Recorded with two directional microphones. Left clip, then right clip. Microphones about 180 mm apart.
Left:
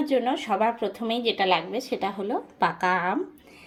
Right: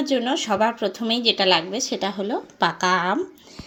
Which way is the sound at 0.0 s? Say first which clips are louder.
Right 2 dB; 35° right (ahead or behind).